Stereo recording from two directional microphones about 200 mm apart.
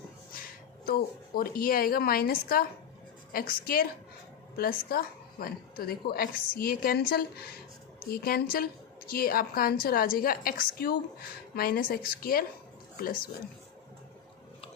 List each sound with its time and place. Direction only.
0.9 s a woman's voice: 50° left (ahead or behind)